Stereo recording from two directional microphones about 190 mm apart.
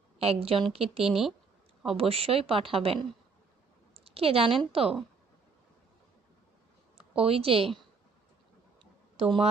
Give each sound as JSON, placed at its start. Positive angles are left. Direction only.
{"t": 0.2, "sound": "a woman's voice", "side_deg": -30}
{"t": 1.0, "sound": "speech", "side_deg": 0}
{"t": 2.0, "sound": "a woman's voice", "side_deg": -30}
{"t": 7.2, "sound": "speech", "side_deg": -30}
{"t": 8.8, "sound": "a sound", "side_deg": -30}